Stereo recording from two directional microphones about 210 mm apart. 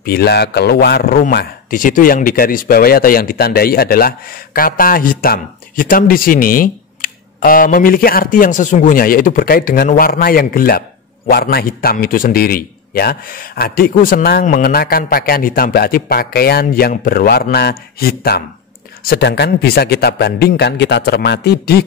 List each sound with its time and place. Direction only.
0.0 s a man's voice: 50° left (ahead or behind)